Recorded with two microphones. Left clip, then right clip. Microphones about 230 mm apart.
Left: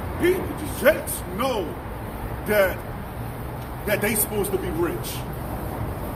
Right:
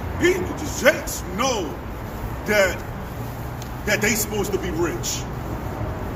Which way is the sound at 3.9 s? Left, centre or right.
Right.